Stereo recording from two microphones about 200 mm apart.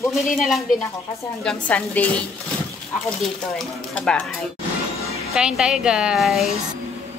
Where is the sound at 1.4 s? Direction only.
5° left (ahead or behind).